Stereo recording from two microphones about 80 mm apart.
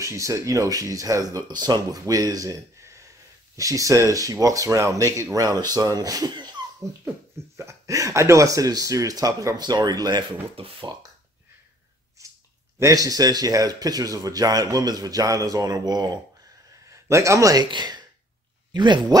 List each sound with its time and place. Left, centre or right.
0.0 s speech: right
1.5 s speech: right
7.1 s speech: right
12.7 s speech: right
16.9 s a man's voice: right
17.6 s speech: right